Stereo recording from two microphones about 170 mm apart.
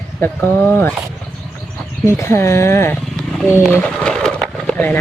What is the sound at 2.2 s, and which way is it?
Speech, 15° left (ahead or behind).